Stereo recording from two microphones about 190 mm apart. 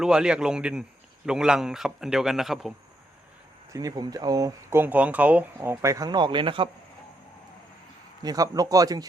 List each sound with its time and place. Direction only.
0.0 s a man's voice: 5° right (ahead or behind)
3.7 s speech: 20° right (ahead or behind)
8.2 s speech: 20° right (ahead or behind)